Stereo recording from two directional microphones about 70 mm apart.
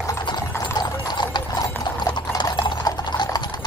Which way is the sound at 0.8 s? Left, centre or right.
Left.